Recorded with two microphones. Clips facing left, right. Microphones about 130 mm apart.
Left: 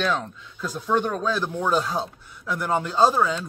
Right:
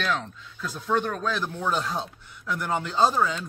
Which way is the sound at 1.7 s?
5° left (ahead or behind).